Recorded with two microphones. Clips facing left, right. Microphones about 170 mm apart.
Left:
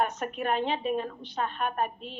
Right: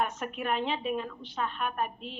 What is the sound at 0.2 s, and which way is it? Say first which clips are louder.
A woman's voice: left 3 dB; 40° left (ahead or behind).